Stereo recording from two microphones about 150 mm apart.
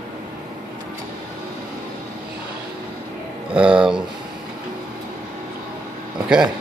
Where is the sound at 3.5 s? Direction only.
5° right (ahead or behind).